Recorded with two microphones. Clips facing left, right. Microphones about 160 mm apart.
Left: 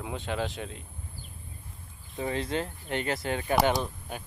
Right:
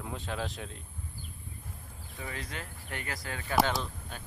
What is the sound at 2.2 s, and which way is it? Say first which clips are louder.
Speech: left 11 dB; 25° left (ahead or behind).